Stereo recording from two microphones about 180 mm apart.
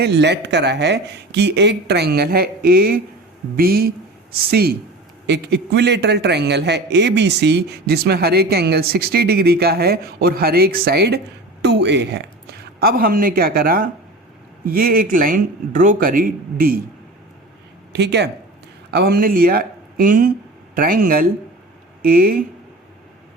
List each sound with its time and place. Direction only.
0.0 s a man's voice: 70° right (ahead or behind)
17.9 s speech: 70° right (ahead or behind); by 22.4 s 55° right (ahead or behind)